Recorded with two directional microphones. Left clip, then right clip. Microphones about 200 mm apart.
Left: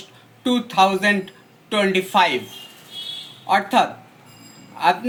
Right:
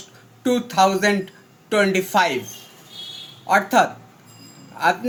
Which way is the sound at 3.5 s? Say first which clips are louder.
Right 1 dB; 35° right (ahead or behind).